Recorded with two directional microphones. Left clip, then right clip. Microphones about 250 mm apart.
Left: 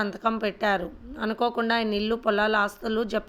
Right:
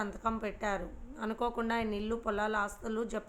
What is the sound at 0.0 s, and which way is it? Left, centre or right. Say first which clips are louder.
A woman's voice: left 9 dB; left.